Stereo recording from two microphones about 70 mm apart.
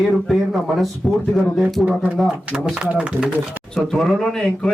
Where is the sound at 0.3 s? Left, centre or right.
Centre.